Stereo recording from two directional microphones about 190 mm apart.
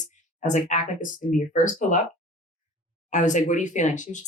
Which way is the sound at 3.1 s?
40° left (ahead or behind).